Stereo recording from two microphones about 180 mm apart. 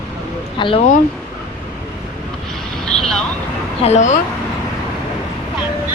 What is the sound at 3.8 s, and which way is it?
Speech, 40° left (ahead or behind).